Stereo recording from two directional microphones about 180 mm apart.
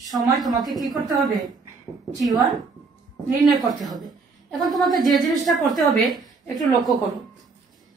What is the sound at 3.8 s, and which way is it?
A woman's voice, centre (ahead or behind).